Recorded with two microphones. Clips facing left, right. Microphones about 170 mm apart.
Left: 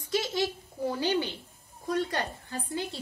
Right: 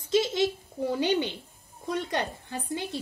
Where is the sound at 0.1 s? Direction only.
20° right (ahead or behind).